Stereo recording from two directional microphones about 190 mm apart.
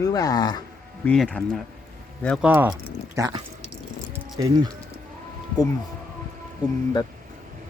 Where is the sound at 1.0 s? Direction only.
5° left (ahead or behind).